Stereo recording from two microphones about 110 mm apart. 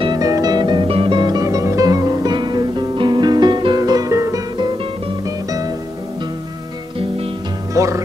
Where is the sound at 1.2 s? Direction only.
35° right (ahead or behind).